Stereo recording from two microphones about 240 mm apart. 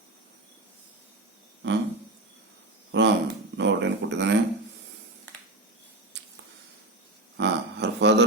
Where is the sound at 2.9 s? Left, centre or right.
Right.